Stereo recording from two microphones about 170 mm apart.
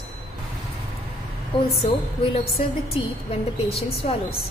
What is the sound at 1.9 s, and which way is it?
Speech, 30° left (ahead or behind).